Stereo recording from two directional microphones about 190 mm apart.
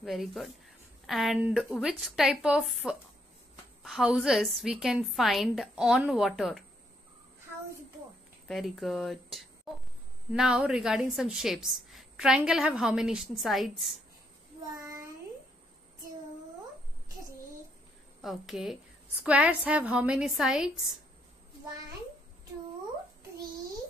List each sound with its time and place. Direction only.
0.0 s a woman's voice: centre (ahead or behind)
8.5 s a woman's voice: centre (ahead or behind)
14.8 s a sound: 15° right (ahead or behind)
18.2 s a woman's voice: centre (ahead or behind)